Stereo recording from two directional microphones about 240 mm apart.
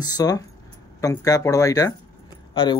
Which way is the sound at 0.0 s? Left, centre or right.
Centre.